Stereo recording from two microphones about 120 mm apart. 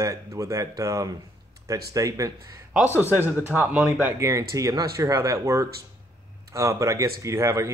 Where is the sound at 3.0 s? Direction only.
15° right (ahead or behind).